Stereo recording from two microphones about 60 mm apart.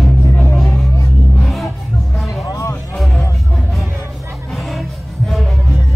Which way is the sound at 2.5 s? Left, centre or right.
Left.